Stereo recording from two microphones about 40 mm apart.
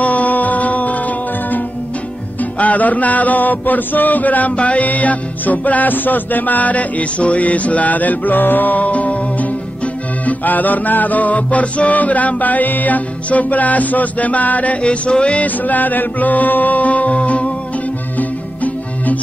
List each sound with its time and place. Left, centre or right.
0.0 s music: left
2.6 s mantra: left
14.8 s music: left
15.4 s music: left